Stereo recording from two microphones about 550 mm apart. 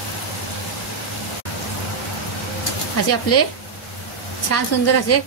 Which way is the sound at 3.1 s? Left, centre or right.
Left.